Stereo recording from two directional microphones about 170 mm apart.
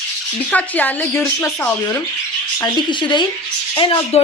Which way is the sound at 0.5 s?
10° left (ahead or behind).